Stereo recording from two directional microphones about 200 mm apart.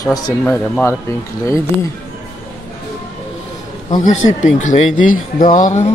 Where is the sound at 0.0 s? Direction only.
15° left (ahead or behind).